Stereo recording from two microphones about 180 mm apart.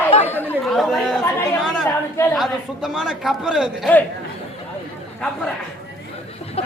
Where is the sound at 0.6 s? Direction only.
Centre (ahead or behind).